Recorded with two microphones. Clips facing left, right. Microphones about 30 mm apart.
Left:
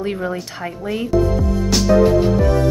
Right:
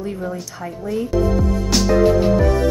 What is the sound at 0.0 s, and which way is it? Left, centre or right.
Speech, left.